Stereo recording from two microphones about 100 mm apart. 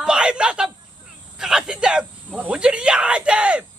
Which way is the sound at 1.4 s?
5° right (ahead or behind).